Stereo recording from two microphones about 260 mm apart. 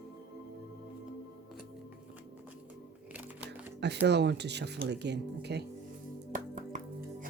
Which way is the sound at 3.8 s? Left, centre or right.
Right.